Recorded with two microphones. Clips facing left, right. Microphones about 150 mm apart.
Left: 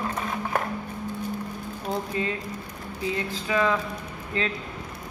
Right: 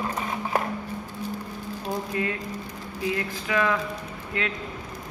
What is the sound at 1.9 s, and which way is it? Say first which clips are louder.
Speech: even; 25° left (ahead or behind).